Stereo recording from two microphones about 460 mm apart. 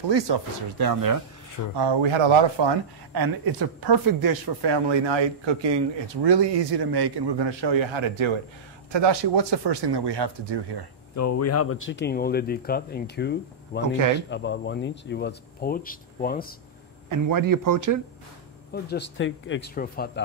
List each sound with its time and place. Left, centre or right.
0.1 s speech: right
1.8 s speech: right
3.2 s speech: right
6.2 s speech: right
8.9 s speech: right
11.1 s speech: left
17.1 s a man's voice: right
18.7 s speech: left